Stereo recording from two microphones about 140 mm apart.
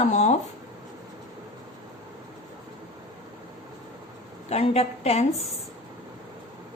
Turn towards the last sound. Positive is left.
turn(degrees=50)  # may be behind; listen again after turning